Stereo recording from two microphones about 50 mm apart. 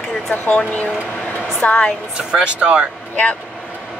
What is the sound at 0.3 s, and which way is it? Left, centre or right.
Speech, left.